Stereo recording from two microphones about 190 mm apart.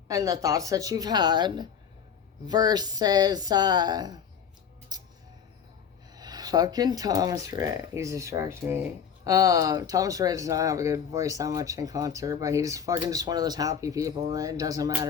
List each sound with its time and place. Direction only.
0.1 s speech: 20° right (ahead or behind)
4.9 s a sound: 20° right (ahead or behind)
6.1 s speech: 20° right (ahead or behind)